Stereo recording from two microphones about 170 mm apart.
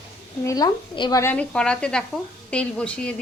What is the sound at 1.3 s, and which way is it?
Stir, 5° left (ahead or behind).